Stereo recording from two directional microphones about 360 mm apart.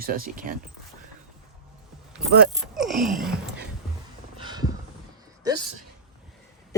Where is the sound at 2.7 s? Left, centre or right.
Centre.